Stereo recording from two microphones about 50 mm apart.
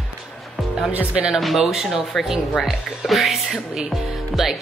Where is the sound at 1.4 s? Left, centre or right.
Centre.